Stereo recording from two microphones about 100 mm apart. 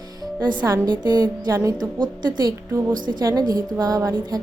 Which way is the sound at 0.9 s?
45° right (ahead or behind).